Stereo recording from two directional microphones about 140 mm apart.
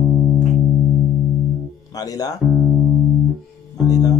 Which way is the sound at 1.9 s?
25° left (ahead or behind).